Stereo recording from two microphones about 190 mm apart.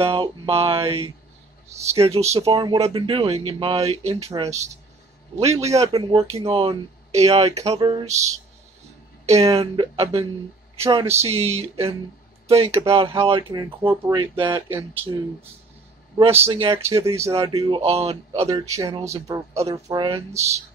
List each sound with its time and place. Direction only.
0.0 s speech: 30° right (ahead or behind)
2.5 s speech: 20° right (ahead or behind)
8.1 s speech: 15° right (ahead or behind)
9.2 s speech: 35° right (ahead or behind)
13.5 s speech: 20° right (ahead or behind)
16.2 s speech: 30° right (ahead or behind)
16.9 s speech: 15° right (ahead or behind)
17.2 s speech: 30° right (ahead or behind)
18.5 s speech: 15° right (ahead or behind)